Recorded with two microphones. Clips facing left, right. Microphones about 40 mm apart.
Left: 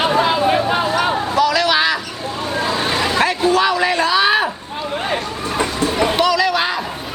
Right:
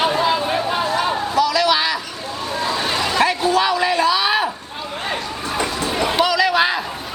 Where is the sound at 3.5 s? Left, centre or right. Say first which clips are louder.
Left 2 dB; centre.